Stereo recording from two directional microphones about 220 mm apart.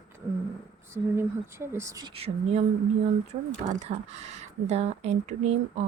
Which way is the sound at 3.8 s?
30° right (ahead or behind).